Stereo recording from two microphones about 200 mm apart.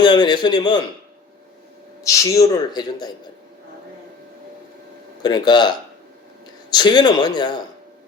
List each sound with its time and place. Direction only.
0.0 s a man's voice: 20° left (ahead or behind)
2.0 s a man's voice: 15° left (ahead or behind)
5.2 s a man's voice: 20° left (ahead or behind)